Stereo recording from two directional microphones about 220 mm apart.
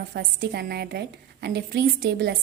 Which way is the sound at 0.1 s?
45° right (ahead or behind).